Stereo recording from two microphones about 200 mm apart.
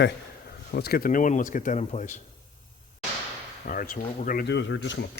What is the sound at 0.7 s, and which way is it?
Speech, 50° left (ahead or behind).